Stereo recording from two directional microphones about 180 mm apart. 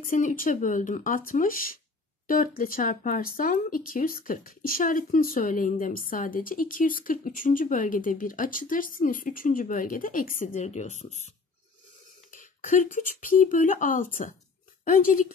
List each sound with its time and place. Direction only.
0.0 s speech: 50° left (ahead or behind)
12.3 s speech: 45° left (ahead or behind)